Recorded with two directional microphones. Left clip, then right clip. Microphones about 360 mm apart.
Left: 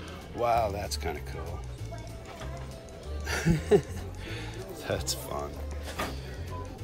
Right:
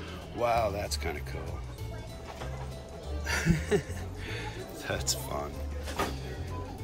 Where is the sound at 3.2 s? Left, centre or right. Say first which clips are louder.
Left 1 dB; centre.